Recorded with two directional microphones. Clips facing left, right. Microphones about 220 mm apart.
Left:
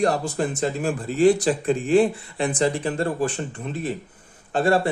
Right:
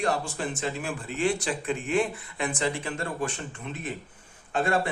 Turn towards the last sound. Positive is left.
turn(degrees=35)  # may be behind; listen again after turning